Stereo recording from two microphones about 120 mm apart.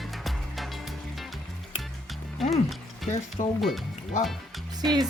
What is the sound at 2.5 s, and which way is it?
Mechanisms, centre (ahead or behind).